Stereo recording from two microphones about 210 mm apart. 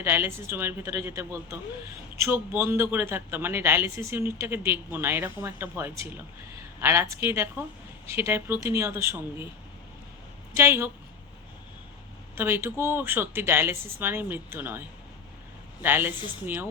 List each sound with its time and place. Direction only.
0.0 s speech: 10° right (ahead or behind)
10.5 s speech: 10° right (ahead or behind)
12.4 s speech: 10° right (ahead or behind)